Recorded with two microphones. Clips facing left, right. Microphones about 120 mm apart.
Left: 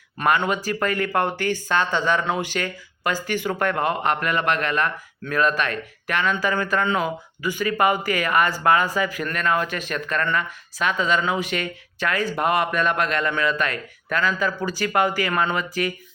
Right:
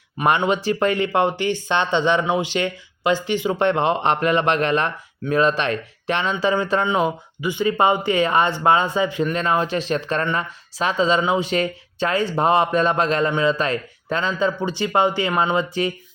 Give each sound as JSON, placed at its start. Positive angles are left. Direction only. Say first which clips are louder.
{"t": 0.3, "sound": "speech", "louder": "right 3 dB", "side_deg": -25}